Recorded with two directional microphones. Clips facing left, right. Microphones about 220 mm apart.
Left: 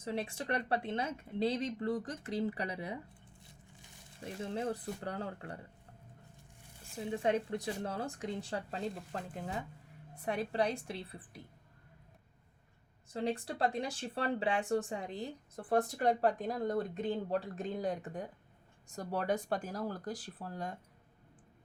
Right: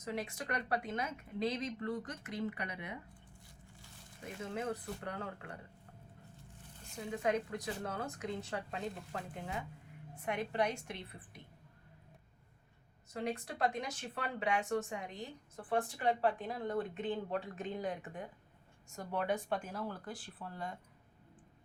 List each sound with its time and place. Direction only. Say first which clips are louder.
0.0 s speech: left 3 dB; 30° left (ahead or behind)
3.4 s a sound: even; 20° left (ahead or behind)
4.2 s speech: left 3 dB; 30° left (ahead or behind)
7.1 s speech: left 2 dB; 30° left (ahead or behind)
13.2 s speech: left 2 dB; 30° left (ahead or behind)